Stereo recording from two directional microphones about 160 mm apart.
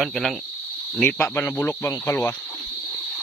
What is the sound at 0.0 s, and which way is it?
Speech, centre (ahead or behind).